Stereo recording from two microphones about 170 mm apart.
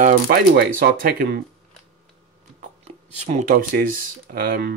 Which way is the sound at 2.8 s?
40° right (ahead or behind).